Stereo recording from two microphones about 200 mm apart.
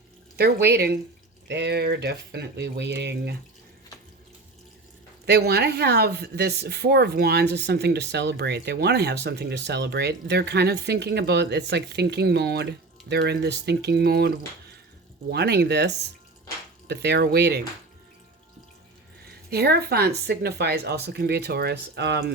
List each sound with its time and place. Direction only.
0.3 s speech: 55° right (ahead or behind)
5.2 s speech: 55° right (ahead or behind)
19.5 s speech: 50° right (ahead or behind)